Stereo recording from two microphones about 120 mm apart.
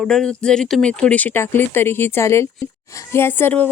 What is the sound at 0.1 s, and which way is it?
Speech, 5° left (ahead or behind).